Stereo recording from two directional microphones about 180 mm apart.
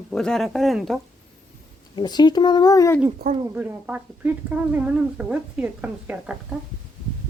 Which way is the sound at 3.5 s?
10° right (ahead or behind).